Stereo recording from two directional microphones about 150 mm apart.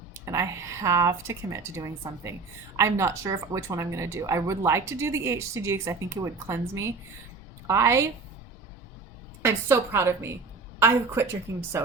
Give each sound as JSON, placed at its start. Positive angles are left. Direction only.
{"t": 0.3, "sound": "speech", "side_deg": -20}
{"t": 9.4, "sound": "a woman's voice", "side_deg": -15}